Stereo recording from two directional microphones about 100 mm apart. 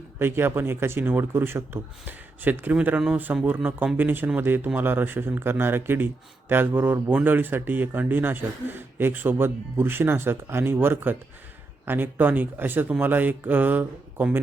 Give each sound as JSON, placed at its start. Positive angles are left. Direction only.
{"t": 0.2, "sound": "speech", "side_deg": -20}